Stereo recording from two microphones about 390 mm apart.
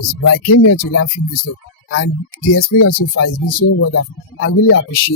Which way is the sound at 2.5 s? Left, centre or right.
Left.